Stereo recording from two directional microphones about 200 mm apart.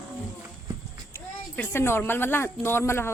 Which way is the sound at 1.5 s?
10° left (ahead or behind).